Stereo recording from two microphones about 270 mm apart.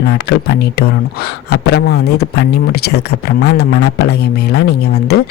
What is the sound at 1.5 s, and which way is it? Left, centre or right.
Speech, left.